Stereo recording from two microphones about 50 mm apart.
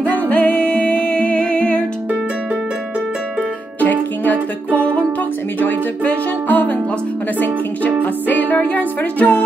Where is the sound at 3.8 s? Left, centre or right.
Left.